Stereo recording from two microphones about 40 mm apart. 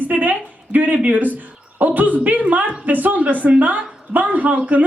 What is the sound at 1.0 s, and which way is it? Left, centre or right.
A woman's voice, right.